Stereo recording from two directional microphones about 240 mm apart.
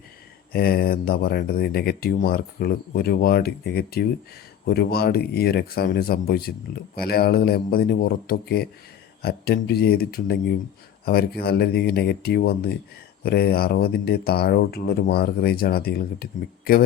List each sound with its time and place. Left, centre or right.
0.5 s speech: left